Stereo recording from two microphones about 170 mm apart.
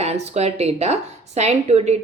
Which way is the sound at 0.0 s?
40° right (ahead or behind).